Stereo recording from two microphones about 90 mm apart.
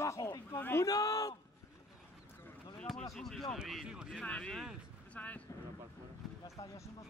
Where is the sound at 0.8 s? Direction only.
40° left (ahead or behind).